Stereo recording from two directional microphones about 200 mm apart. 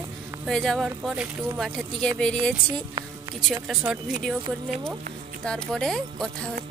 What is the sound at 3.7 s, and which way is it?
Speech, centre (ahead or behind).